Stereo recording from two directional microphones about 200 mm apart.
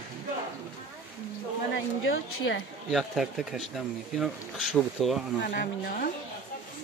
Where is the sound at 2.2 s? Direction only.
75° left (ahead or behind).